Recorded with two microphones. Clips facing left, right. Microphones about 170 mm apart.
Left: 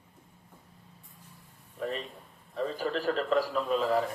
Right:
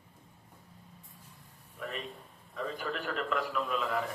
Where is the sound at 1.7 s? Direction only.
35° left (ahead or behind).